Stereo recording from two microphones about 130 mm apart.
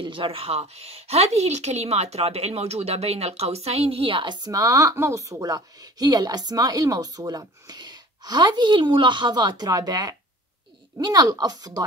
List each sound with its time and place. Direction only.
0.0 s a woman's voice: 40° right (ahead or behind)